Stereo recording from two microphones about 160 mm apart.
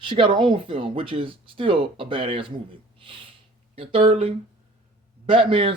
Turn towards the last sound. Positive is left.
turn(degrees=-35)  # may be behind; listen again after turning